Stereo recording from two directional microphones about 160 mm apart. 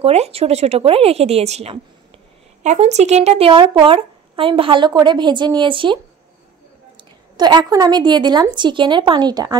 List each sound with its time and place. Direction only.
0.0 s speech: 40° right (ahead or behind)
7.3 s speech: 25° right (ahead or behind)